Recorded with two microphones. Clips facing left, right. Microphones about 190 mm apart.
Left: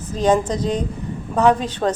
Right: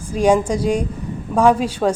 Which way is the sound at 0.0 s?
10° right (ahead or behind).